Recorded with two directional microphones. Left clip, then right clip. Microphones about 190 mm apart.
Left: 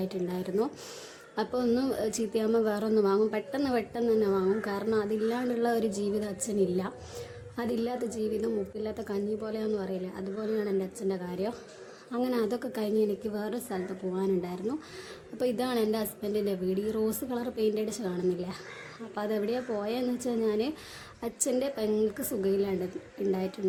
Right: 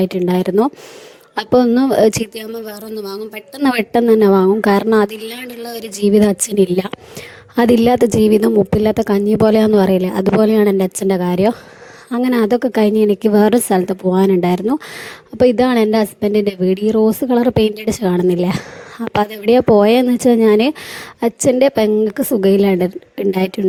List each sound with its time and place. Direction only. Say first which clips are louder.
0.0 s a woman's voice: right 17 dB; 50° right (ahead or behind)
2.4 s speech: even; centre (ahead or behind)
3.6 s a woman's voice: right 18 dB; 50° right (ahead or behind)